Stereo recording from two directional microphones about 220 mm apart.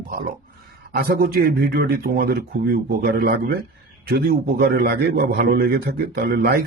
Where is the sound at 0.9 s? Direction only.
40° right (ahead or behind).